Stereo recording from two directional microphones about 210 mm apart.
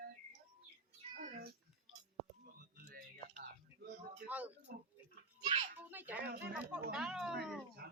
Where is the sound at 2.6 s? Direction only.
40° right (ahead or behind).